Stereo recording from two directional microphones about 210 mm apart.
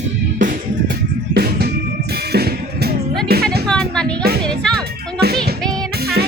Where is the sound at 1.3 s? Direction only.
45° right (ahead or behind).